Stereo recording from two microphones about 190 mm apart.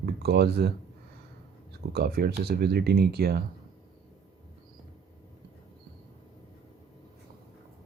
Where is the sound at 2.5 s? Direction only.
55° right (ahead or behind).